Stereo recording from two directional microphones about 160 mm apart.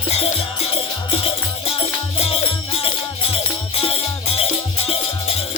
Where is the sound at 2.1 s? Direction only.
40° left (ahead or behind).